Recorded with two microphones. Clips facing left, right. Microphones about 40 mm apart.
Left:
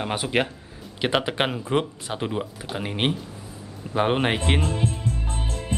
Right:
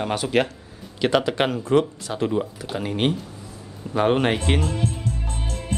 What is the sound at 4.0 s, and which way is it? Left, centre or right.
Music, centre.